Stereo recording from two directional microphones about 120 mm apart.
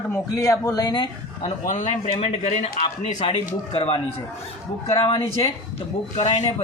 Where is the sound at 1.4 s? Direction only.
80° left.